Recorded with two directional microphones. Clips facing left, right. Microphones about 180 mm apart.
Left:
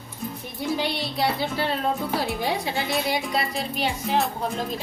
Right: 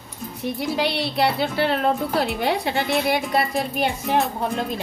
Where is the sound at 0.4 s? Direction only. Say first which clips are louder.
Right 4 dB; 70° right (ahead or behind).